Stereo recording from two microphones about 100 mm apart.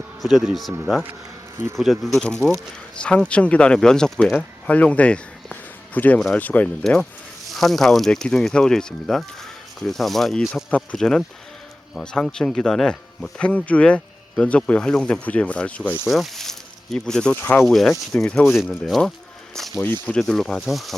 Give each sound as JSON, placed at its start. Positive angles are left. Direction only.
{"t": 0.2, "sound": "speech", "side_deg": 0}
{"t": 1.7, "sound": "speech", "side_deg": 0}
{"t": 4.6, "sound": "a sound", "side_deg": 15}
{"t": 6.3, "sound": "speech", "side_deg": 15}
{"t": 6.8, "sound": "speech", "side_deg": 0}
{"t": 16.0, "sound": "speech", "side_deg": 0}
{"t": 17.3, "sound": "speech", "side_deg": 20}
{"t": 17.7, "sound": "speech", "side_deg": 0}
{"t": 19.8, "sound": "speech", "side_deg": 15}